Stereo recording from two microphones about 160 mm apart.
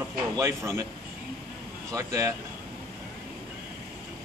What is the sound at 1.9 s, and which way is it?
Speech, 20° right (ahead or behind).